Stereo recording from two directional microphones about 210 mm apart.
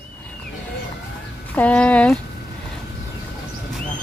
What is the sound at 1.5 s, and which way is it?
Speech, 5° left (ahead or behind).